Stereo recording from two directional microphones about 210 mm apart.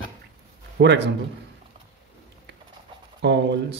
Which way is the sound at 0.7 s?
55° right (ahead or behind).